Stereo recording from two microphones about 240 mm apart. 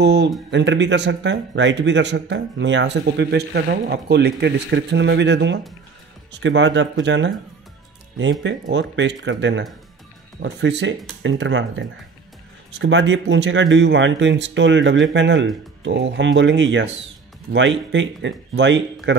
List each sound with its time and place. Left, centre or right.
0.0 s speech: right